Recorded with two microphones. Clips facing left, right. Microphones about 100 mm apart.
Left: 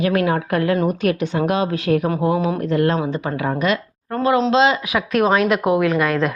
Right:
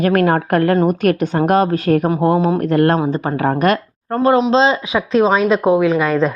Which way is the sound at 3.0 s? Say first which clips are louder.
Right 4 dB; 40° right (ahead or behind).